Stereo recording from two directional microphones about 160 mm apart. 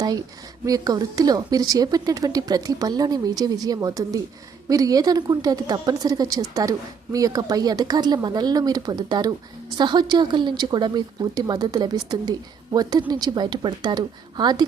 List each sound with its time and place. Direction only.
0.0 s a woman's voice: 25° right (ahead or behind)